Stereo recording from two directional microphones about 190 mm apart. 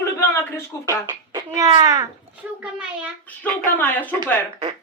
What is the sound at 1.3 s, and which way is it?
Speech, 20° right (ahead or behind).